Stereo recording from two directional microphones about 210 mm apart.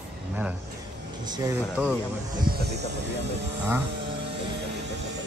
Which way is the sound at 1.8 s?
5° right (ahead or behind).